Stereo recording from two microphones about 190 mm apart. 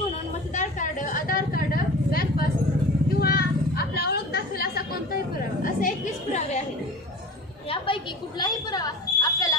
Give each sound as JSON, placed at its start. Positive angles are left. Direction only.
{"t": 0.6, "sound": "a sound", "side_deg": 40}
{"t": 5.6, "sound": "chatter", "side_deg": 45}
{"t": 7.7, "sound": "smoke detector", "side_deg": 25}